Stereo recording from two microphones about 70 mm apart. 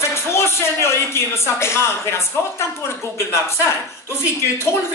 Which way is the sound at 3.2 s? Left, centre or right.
Left.